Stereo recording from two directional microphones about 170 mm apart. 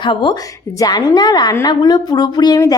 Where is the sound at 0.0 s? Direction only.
30° left (ahead or behind).